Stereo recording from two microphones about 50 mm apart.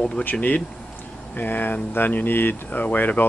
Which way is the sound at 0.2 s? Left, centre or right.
Left.